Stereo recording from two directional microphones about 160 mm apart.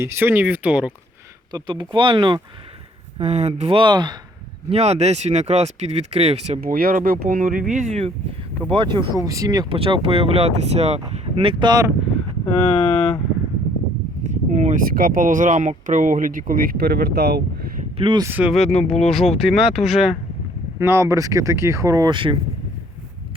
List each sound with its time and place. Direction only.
0.0 s speech: 15° right (ahead or behind)
1.5 s speech: 30° right (ahead or behind)
3.2 s speech: 40° right (ahead or behind)
4.7 s speech: 40° right (ahead or behind)
6.6 s speech: 65° right (ahead or behind)
8.7 s speech: 30° right (ahead or behind)
9.7 s speech: 35° right (ahead or behind)
12.5 s speech: 35° left (ahead or behind)
14.3 s speech: 50° right (ahead or behind); by 17.4 s 90° right
17.9 s speech: 30° right (ahead or behind)
18.2 s speech: 10° right (ahead or behind)
18.6 s speech: 45° left (ahead or behind)
19.0 s speech: centre (ahead or behind)
20.7 s speech: 15° right (ahead or behind); by 22.4 s 30° right (ahead or behind)